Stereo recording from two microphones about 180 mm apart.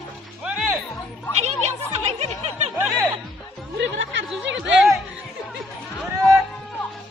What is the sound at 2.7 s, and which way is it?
Music, 10° right (ahead or behind).